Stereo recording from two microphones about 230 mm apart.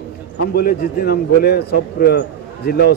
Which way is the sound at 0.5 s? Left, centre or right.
Left.